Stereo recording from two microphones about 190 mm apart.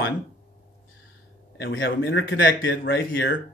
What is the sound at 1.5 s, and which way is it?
Speech, 70° left (ahead or behind).